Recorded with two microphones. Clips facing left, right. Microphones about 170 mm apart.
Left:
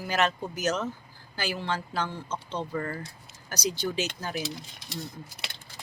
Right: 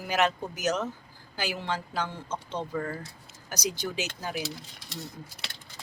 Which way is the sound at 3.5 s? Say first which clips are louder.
Left 2 dB; 15° right (ahead or behind).